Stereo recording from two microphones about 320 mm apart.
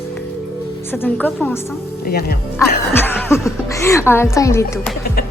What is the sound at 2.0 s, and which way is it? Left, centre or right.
Speech, left.